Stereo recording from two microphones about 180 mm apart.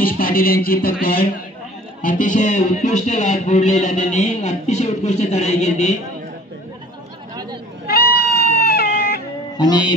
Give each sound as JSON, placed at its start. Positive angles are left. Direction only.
{"t": 0.0, "sound": "speech", "side_deg": 50}
{"t": 2.0, "sound": "speech", "side_deg": 50}
{"t": 7.8, "sound": "goat", "side_deg": 60}
{"t": 9.6, "sound": "music", "side_deg": 25}